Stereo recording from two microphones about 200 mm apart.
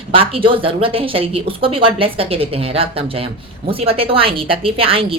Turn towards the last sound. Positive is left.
turn(degrees=-30)  # may be behind; listen again after turning